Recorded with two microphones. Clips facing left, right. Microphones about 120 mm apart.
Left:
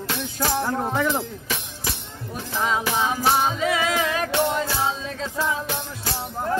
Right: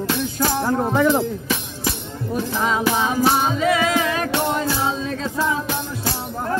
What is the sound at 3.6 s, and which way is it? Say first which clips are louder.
Music: right 4 dB; 55° right (ahead or behind).